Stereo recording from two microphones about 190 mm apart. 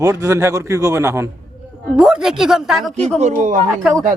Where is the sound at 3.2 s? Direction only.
40° right (ahead or behind).